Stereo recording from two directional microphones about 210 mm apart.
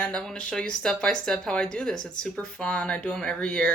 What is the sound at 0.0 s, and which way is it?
A woman's voice, 5° left (ahead or behind).